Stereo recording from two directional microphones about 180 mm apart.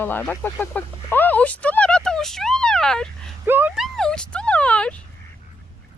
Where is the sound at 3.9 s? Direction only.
5° left (ahead or behind).